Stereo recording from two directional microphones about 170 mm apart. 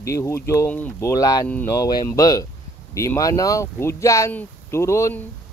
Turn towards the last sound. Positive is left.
turn(degrees=15)  # may be behind; listen again after turning